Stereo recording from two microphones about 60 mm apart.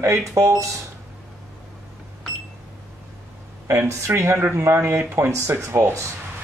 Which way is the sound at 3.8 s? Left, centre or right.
Right.